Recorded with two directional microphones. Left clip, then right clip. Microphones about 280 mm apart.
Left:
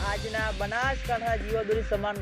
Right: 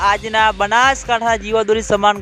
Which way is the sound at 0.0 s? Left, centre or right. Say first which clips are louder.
Right 16 dB; right.